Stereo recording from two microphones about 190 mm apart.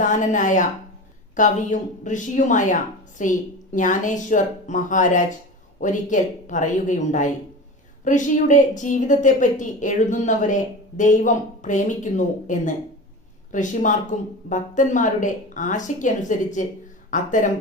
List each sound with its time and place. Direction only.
0.0 s a woman's voice: 40° left (ahead or behind)